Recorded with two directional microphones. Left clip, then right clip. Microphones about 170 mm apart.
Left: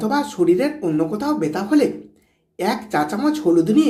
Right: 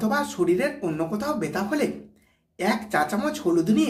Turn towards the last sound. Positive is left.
turn(degrees=15)  # may be behind; listen again after turning